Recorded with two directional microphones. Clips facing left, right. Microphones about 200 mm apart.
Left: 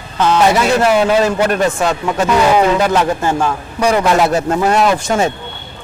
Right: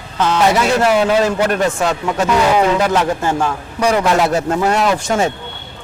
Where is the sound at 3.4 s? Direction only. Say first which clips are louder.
Left 1 dB; 25° left (ahead or behind).